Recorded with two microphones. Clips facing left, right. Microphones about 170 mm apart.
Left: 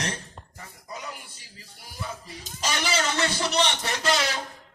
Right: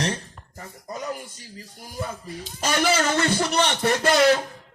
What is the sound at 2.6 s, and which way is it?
Music, 50° right (ahead or behind).